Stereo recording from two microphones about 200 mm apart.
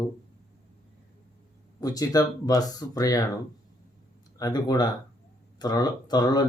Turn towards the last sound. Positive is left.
turn(degrees=20)  # may be behind; listen again after turning